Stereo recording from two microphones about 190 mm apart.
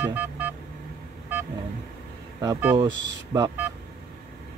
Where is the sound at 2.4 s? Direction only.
10° right (ahead or behind).